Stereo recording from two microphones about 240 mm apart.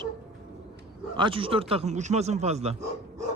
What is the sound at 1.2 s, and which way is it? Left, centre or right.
Speech, right.